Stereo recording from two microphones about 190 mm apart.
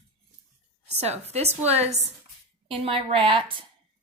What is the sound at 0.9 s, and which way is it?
A woman's voice, 35° right (ahead or behind).